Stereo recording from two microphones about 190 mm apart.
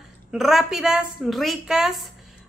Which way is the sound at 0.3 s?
Centre (ahead or behind).